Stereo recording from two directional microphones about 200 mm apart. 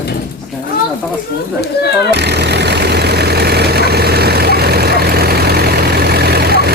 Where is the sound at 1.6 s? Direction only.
55° left (ahead or behind).